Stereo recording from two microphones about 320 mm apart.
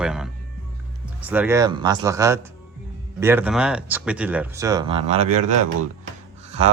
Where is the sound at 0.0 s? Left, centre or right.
Centre.